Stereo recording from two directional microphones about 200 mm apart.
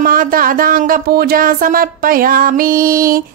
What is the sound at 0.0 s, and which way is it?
Speech, 45° right (ahead or behind).